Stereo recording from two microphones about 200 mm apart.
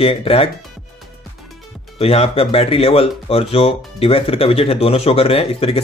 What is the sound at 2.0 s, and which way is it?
Speech, 30° left (ahead or behind).